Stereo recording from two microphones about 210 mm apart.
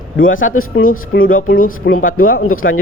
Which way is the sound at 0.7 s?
45° left (ahead or behind).